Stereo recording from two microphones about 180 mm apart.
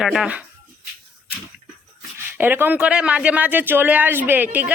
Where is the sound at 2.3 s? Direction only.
10° right (ahead or behind).